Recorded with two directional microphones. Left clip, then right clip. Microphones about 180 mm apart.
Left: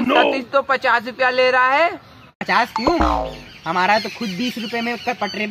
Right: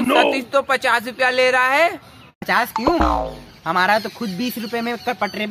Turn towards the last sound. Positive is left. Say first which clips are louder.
# even
turn(degrees=0)  # may be behind; listen again after turning